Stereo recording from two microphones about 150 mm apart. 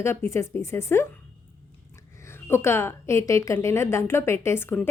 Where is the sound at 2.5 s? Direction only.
15° left (ahead or behind).